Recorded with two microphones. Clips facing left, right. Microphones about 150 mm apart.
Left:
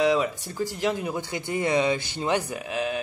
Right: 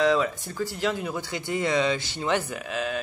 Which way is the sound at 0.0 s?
15° left (ahead or behind).